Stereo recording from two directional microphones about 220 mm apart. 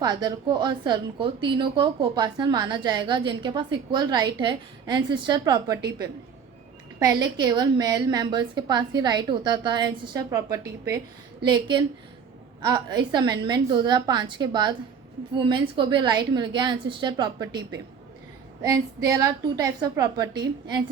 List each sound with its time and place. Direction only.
0.0 s a woman's voice: 20° right (ahead or behind)
7.0 s a woman's voice: 15° right (ahead or behind)